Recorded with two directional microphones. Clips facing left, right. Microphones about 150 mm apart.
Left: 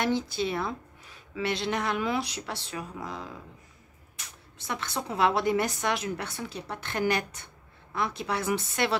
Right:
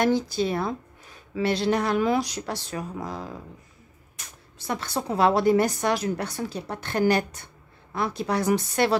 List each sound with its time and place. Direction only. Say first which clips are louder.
0.0 s speech: right 5 dB; 40° right (ahead or behind)